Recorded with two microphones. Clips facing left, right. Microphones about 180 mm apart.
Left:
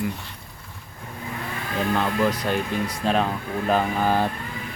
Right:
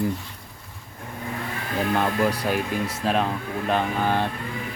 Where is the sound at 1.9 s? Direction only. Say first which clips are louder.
Even; 10° right (ahead or behind); by 4.3 s 10° left (ahead or behind).